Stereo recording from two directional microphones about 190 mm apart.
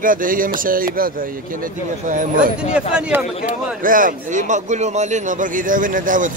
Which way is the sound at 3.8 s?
45° right (ahead or behind).